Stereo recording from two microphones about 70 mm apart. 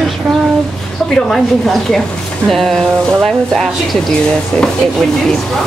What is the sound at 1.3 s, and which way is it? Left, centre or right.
Speech, centre.